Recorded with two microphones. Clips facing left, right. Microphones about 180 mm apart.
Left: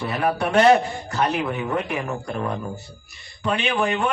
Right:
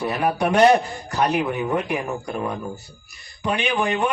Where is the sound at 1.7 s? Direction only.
15° right (ahead or behind).